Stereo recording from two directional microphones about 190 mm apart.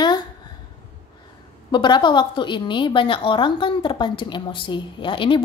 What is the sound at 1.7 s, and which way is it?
A woman's voice, 25° left (ahead or behind).